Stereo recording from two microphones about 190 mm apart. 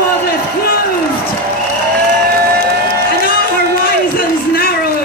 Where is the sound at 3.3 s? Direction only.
50° left (ahead or behind).